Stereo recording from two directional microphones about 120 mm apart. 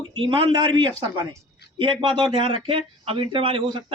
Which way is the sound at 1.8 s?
45° right (ahead or behind).